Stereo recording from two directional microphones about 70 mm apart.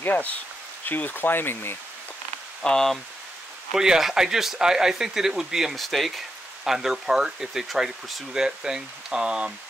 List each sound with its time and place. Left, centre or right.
0.0 s speech: left
2.6 s speech: centre
3.7 s speech: centre